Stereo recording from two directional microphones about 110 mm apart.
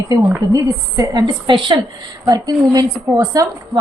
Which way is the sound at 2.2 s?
35° right (ahead or behind).